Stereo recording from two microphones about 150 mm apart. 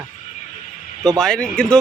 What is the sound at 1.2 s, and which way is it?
Speech, 5° left (ahead or behind).